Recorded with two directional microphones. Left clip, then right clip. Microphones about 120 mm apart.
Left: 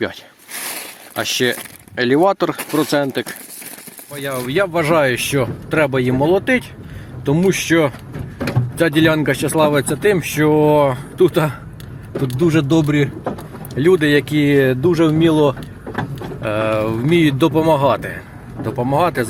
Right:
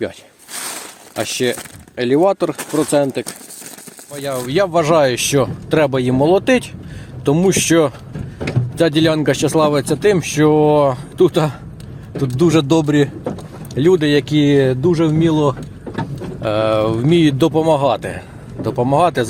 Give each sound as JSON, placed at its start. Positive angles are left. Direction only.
{"t": 0.6, "sound": "a sound", "side_deg": 0}
{"t": 2.0, "sound": "speech", "side_deg": 0}
{"t": 4.1, "sound": "speech", "side_deg": -25}
{"t": 7.3, "sound": "speech", "side_deg": -45}
{"t": 8.7, "sound": "speech", "side_deg": -25}
{"t": 12.4, "sound": "speech", "side_deg": -45}
{"t": 12.6, "sound": "a man's voice", "side_deg": -65}
{"t": 13.7, "sound": "speech", "side_deg": -15}
{"t": 14.8, "sound": "speech", "side_deg": 15}
{"t": 16.4, "sound": "speech", "side_deg": -20}